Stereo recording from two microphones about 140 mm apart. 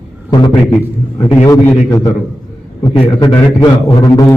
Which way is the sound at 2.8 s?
35° left (ahead or behind).